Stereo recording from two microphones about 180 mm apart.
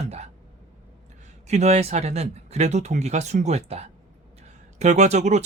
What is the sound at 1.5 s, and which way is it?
Speech, 40° right (ahead or behind).